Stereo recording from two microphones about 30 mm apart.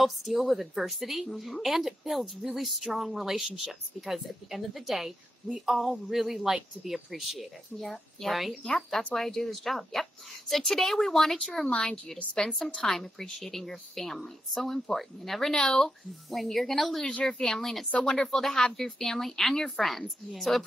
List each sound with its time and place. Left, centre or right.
0.0 s speech: centre
7.7 s a woman's voice: centre
8.3 s speech: centre
8.9 s a woman's voice: centre
11.7 s a woman's voice: left
12.6 s a woman's voice: centre